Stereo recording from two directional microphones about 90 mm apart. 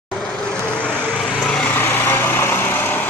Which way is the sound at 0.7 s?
15° left (ahead or behind).